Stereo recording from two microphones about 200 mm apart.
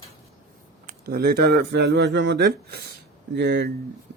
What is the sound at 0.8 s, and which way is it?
Speech, 50° right (ahead or behind).